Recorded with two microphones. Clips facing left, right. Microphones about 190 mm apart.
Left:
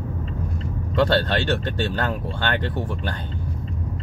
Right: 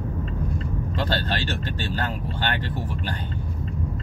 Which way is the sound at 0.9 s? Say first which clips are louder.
Left 8 dB; 65° left (ahead or behind).